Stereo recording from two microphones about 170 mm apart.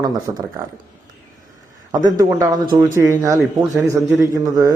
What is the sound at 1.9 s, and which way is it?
Speech, 20° right (ahead or behind).